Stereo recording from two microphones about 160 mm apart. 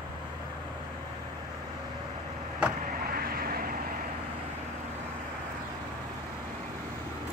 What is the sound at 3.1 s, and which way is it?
Vehicle, 65° right (ahead or behind).